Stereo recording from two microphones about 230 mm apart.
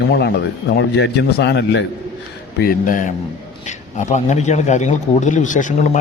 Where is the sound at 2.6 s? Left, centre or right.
Left.